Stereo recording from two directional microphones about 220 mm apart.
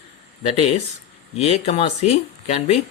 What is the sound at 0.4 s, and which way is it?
Speech, 30° left (ahead or behind).